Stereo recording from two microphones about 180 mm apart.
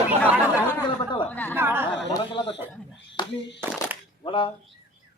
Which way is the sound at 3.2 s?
25° left (ahead or behind).